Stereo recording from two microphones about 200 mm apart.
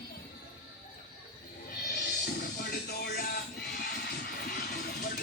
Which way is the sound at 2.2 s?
50° left (ahead or behind).